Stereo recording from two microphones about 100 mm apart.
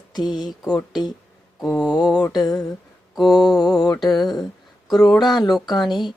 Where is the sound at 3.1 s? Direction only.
40° left (ahead or behind).